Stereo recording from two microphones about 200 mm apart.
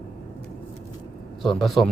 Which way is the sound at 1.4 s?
Centre (ahead or behind).